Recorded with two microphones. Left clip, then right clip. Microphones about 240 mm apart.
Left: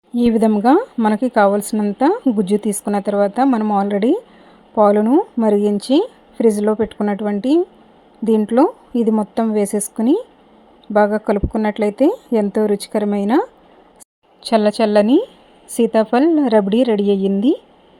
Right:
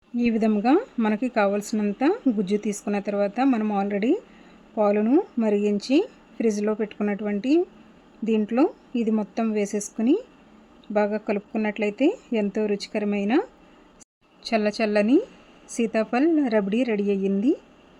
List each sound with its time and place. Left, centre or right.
0.3 s a woman's voice: centre